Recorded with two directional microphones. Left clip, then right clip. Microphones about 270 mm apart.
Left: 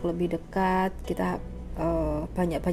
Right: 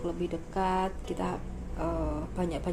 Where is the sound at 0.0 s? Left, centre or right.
Left.